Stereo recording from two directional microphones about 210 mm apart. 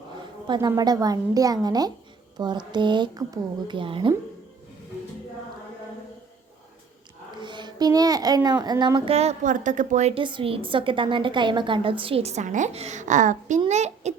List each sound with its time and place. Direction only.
0.4 s a woman's voice: 20° right (ahead or behind)
7.4 s a child's voice: 20° right (ahead or behind)